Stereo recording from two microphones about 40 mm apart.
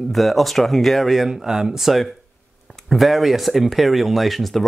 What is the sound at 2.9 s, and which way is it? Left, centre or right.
Speech, centre.